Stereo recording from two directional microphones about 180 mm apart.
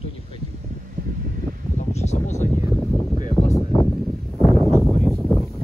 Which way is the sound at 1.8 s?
40° left (ahead or behind).